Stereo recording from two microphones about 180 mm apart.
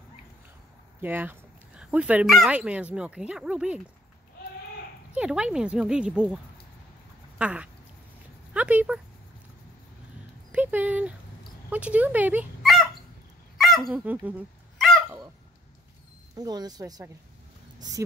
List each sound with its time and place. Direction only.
1.0 s speech: 10° right (ahead or behind)
5.1 s speech: 5° right (ahead or behind)
7.3 s a sound: 5° right (ahead or behind)
8.5 s speech: 10° right (ahead or behind)
10.5 s speech: 10° right (ahead or behind)
13.6 s dog: centre (ahead or behind)
16.3 s speech: 20° right (ahead or behind)